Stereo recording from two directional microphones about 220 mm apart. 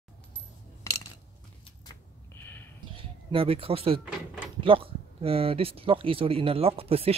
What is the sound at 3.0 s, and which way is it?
Speech, 25° right (ahead or behind).